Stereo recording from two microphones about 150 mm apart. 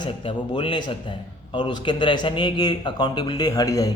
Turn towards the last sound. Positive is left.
turn(degrees=25)  # may be behind; listen again after turning